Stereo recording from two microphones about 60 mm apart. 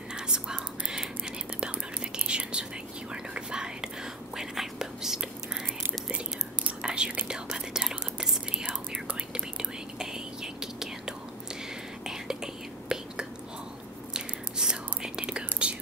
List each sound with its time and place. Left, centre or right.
0.1 s whispering: centre
2.1 s whispering: centre
12.8 s whispering: centre